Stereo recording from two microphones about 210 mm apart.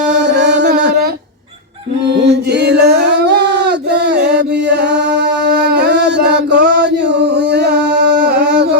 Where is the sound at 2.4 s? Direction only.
50° right (ahead or behind).